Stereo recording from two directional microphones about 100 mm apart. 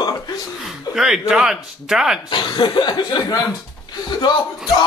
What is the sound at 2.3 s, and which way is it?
Speech, 50° left (ahead or behind).